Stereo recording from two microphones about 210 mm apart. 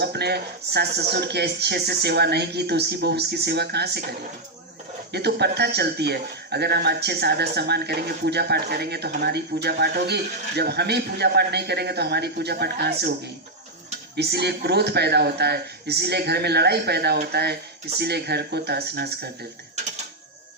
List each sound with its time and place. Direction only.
0.0 s speech: 50° right (ahead or behind)
5.1 s speech: 50° right (ahead or behind)
14.2 s speech: 50° right (ahead or behind)